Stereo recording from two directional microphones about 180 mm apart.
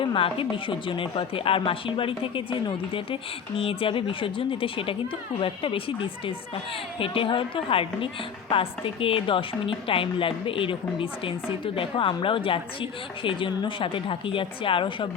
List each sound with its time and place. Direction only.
0.0 s a woman's voice: 30° left (ahead or behind)